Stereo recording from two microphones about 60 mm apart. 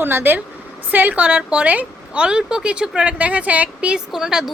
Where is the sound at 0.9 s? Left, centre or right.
Right.